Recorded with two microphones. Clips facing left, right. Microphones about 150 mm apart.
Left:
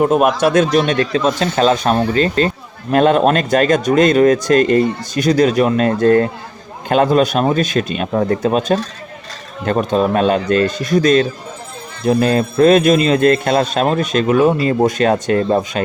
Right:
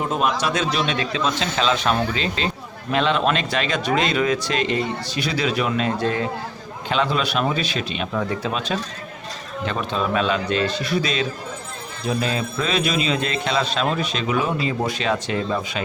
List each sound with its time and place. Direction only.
0.0 s speech: 55° left (ahead or behind)